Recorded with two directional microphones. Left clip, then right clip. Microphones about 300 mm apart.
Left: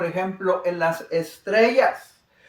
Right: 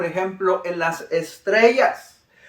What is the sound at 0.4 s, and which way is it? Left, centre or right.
Speech, centre.